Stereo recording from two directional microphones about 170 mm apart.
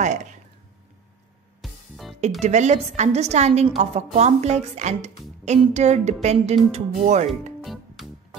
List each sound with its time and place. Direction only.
1.6 s music: centre (ahead or behind)
2.4 s a woman's voice: 40° right (ahead or behind)
7.6 s music: centre (ahead or behind)